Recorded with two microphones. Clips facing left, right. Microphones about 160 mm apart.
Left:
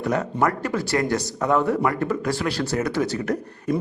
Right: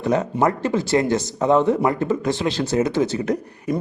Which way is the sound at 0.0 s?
20° right (ahead or behind).